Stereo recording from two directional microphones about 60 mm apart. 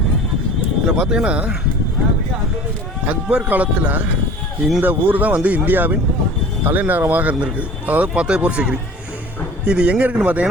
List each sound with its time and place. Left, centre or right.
0.9 s speech: centre
3.1 s a man's voice: right